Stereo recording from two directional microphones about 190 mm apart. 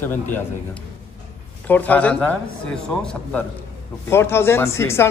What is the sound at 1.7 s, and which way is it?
Speech, 10° left (ahead or behind).